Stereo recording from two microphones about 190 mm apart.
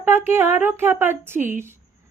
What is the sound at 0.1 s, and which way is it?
A woman's voice, 10° right (ahead or behind).